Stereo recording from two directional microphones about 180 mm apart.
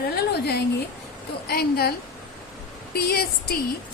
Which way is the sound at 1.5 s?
60° left (ahead or behind).